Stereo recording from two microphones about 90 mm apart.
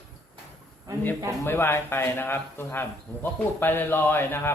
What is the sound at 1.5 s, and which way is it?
A man's voice, 25° left (ahead or behind).